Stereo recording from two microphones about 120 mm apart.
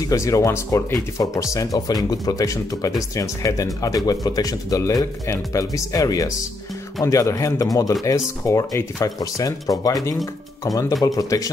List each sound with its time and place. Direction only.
0.0 s speech: 25° left (ahead or behind)